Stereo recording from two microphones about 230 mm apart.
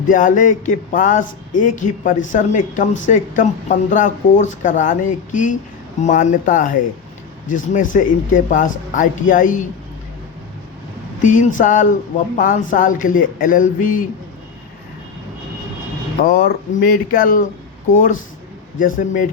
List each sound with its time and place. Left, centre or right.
0.1 s speech: left
11.2 s speech: left
16.2 s speech: left